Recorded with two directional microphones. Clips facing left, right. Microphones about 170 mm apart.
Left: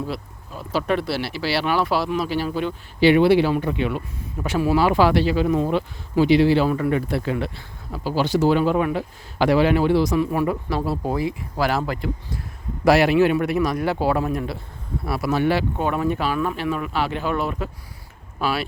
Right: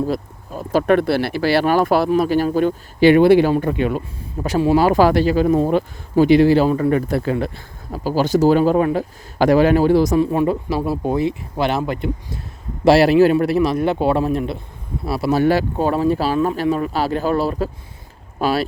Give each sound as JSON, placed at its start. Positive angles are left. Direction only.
{"t": 0.1, "sound": "speech", "side_deg": -45}
{"t": 6.7, "sound": "a man's voice", "side_deg": -30}
{"t": 6.9, "sound": "speech", "side_deg": -45}
{"t": 10.2, "sound": "a man's voice", "side_deg": -25}
{"t": 12.8, "sound": "a man's voice", "side_deg": -30}